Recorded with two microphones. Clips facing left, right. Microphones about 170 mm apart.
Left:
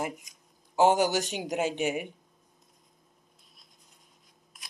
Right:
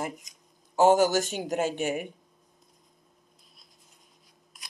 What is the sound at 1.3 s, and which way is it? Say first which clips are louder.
Speech: right 1 dB; 10° left (ahead or behind).